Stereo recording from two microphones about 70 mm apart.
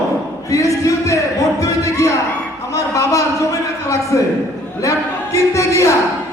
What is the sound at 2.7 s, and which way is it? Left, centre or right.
A man's voice, left.